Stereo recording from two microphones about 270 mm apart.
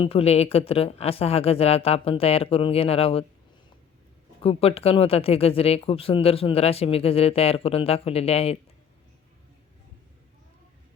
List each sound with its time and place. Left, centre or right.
0.0 s speech: left
4.4 s speech: left